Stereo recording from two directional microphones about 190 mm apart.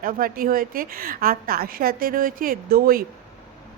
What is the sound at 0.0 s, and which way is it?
A woman's voice, 50° right (ahead or behind).